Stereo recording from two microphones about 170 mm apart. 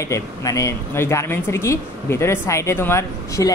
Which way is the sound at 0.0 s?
20° left (ahead or behind).